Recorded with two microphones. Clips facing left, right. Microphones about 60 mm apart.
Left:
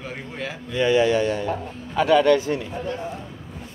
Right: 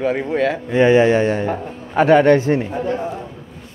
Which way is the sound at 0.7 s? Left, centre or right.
Right.